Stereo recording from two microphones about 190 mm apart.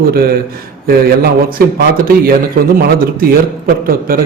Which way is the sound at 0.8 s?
50° right (ahead or behind).